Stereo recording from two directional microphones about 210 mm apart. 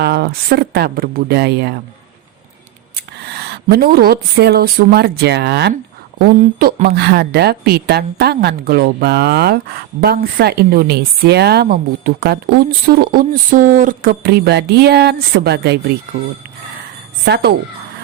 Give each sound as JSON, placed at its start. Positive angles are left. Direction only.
{"t": 0.0, "sound": "speech", "side_deg": -50}
{"t": 2.9, "sound": "speech", "side_deg": -50}
{"t": 17.2, "sound": "speech", "side_deg": -50}